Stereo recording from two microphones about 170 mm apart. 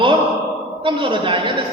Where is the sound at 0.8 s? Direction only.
30° right (ahead or behind).